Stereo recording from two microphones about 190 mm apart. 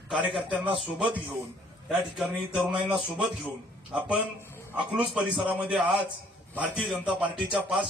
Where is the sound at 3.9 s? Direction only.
5° right (ahead or behind).